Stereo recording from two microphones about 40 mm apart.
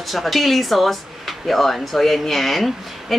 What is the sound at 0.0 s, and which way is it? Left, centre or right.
A woman's voice, centre.